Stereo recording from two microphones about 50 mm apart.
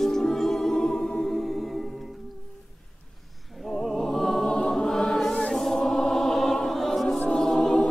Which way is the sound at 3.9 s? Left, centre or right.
Centre.